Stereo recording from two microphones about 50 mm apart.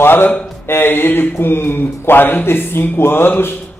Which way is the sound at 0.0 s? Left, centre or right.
Left.